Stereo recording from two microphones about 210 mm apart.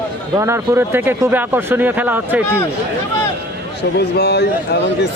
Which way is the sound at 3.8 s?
50° left (ahead or behind).